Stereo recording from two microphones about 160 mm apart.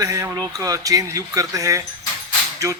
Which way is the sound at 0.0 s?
20° right (ahead or behind).